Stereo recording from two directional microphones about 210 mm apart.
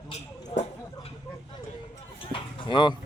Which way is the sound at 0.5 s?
30° left (ahead or behind).